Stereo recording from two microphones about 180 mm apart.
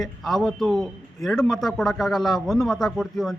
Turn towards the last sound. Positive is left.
turn(degrees=0)  # may be behind; listen again after turning